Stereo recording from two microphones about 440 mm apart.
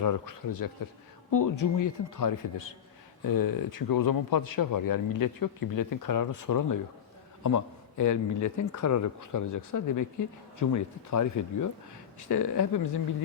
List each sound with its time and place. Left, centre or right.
0.0 s speech: left